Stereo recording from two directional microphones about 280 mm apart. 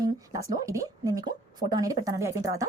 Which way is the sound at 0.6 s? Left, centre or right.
Centre.